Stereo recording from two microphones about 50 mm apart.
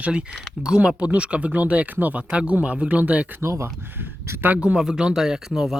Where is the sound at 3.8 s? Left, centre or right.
Right.